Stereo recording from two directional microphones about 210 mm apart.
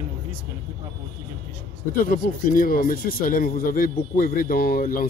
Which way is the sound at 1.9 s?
40° left (ahead or behind).